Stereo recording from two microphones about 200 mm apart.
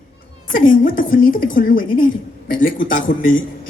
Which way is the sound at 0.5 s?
45° left (ahead or behind).